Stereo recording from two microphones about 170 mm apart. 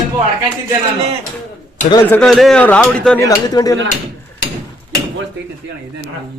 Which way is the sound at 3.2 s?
20° left (ahead or behind).